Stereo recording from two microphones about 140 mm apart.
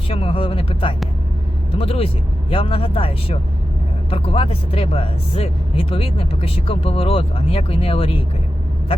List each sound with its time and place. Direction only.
0.1 s speech: 40° left (ahead or behind)